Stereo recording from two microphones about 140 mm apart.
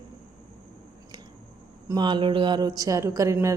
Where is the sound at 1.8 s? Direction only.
30° right (ahead or behind).